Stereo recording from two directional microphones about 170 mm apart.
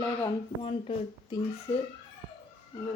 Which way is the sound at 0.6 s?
30° left (ahead or behind).